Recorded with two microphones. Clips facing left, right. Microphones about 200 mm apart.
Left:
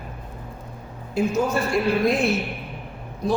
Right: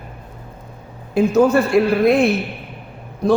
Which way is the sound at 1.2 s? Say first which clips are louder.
Right 8 dB; 60° right (ahead or behind).